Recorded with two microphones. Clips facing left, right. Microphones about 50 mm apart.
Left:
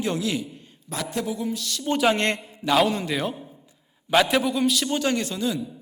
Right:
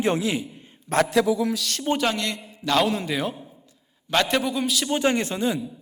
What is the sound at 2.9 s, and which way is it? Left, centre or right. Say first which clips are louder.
A man's voice: even; centre.